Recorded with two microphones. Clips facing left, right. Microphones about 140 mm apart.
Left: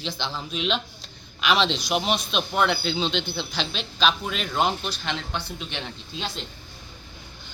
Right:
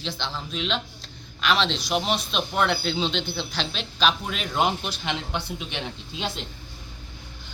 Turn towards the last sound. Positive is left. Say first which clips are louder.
# right 2 dB
turn(degrees=-10)  # may be behind; listen again after turning